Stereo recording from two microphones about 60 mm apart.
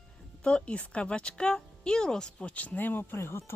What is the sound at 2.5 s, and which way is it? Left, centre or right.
Speech, left.